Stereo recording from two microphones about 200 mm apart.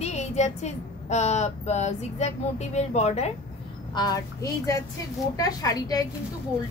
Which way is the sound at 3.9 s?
20° left (ahead or behind).